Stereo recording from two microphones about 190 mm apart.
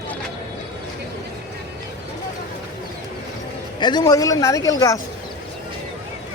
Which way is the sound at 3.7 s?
20° left (ahead or behind).